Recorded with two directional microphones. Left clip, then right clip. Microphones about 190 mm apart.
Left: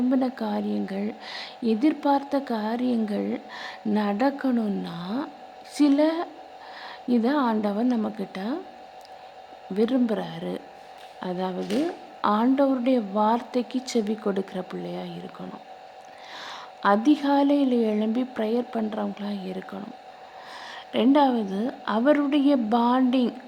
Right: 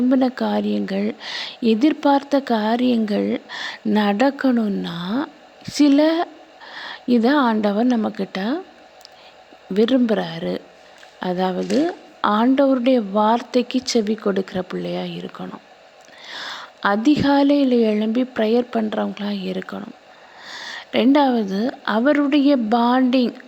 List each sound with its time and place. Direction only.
0.1 s a woman's voice: 20° right (ahead or behind)
9.7 s a woman's voice: 20° right (ahead or behind)